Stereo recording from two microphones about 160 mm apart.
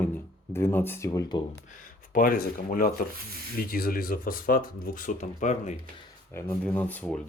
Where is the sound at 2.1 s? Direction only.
65° left (ahead or behind); by 5.8 s 50° left (ahead or behind).